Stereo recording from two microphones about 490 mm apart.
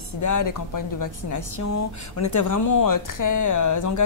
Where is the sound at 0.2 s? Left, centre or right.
Left.